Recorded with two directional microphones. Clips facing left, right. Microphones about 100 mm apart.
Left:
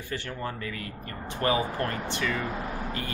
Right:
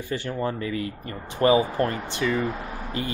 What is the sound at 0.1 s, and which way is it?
Speech, 15° right (ahead or behind).